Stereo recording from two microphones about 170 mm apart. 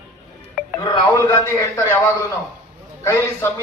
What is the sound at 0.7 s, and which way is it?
Speech, 25° left (ahead or behind).